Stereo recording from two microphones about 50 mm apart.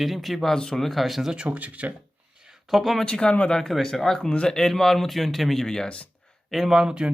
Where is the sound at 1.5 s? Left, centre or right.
Right.